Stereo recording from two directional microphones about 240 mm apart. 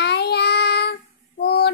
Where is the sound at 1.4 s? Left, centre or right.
Left.